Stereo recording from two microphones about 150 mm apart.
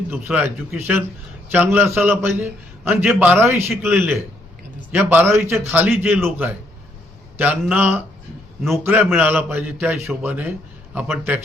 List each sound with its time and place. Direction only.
0.1 s a man's voice: 10° right (ahead or behind)